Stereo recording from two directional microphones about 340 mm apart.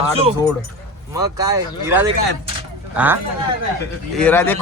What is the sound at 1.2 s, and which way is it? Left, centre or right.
Speech, centre.